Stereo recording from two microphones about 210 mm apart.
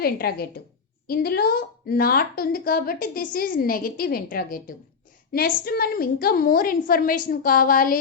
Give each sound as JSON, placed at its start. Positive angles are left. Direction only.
{"t": 0.0, "sound": "a woman's voice", "side_deg": 45}